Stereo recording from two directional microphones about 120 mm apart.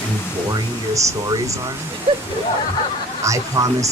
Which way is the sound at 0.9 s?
25° right (ahead or behind).